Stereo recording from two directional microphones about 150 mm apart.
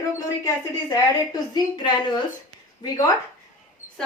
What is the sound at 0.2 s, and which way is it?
A woman's voice, 25° left (ahead or behind).